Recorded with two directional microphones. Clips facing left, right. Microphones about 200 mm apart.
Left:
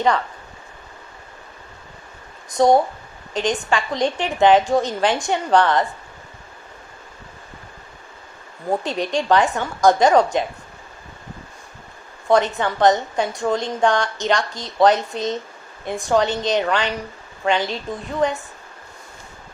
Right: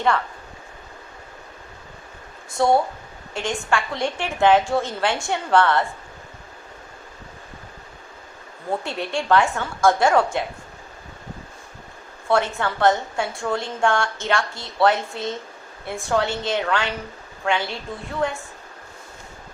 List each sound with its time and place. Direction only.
2.5 s a woman's voice: 20° left (ahead or behind)
8.7 s a woman's voice: 20° left (ahead or behind)
12.3 s a woman's voice: 20° left (ahead or behind)